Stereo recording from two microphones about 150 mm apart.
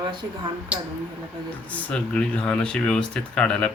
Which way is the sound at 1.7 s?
5° left (ahead or behind).